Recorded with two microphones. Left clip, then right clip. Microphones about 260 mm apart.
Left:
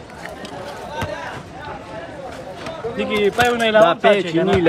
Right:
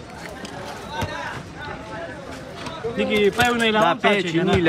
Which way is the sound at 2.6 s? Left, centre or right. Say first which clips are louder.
Even; centre.